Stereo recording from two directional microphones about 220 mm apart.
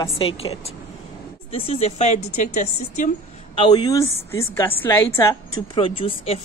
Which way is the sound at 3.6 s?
20° left (ahead or behind).